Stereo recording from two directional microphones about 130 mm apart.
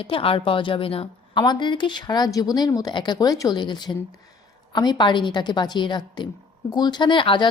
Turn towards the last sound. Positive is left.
turn(degrees=40)  # may be behind; listen again after turning